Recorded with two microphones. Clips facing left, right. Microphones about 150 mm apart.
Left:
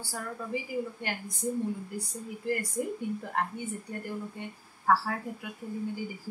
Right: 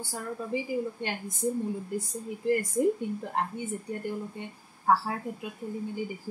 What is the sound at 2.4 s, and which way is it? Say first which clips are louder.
Speech: right 7 dB; 20° right (ahead or behind).